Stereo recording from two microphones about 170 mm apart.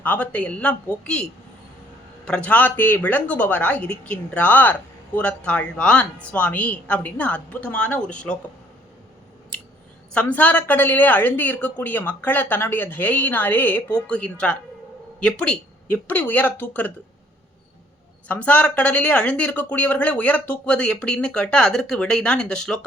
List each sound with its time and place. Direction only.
0.0 s speech: 10° left (ahead or behind)
10.1 s speech: 5° left (ahead or behind)
18.3 s speech: 10° left (ahead or behind)